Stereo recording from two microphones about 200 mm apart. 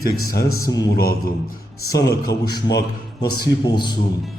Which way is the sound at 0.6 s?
20° left (ahead or behind).